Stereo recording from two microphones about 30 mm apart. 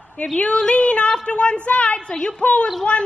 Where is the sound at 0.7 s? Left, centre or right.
Left.